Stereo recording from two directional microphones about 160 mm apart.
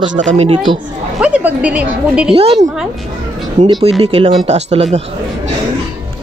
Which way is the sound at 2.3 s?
35° right (ahead or behind).